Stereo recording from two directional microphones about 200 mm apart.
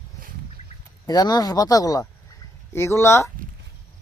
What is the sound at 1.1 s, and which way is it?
Speech, 20° left (ahead or behind).